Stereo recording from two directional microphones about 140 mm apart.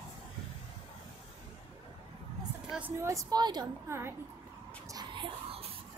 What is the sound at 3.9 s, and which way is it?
Speech, 20° right (ahead or behind).